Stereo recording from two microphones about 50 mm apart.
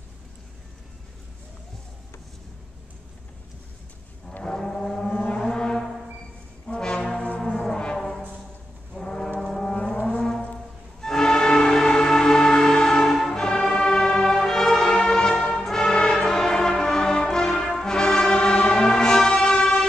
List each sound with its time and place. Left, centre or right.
4.4 s foghorn: centre
5.1 s foghorn: left
5.4 s music: centre
6.7 s brass instrument: centre
7.3 s music: centre
9.4 s foghorn: centre
10.0 s music: centre